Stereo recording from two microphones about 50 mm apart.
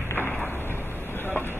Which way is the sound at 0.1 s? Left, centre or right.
Left.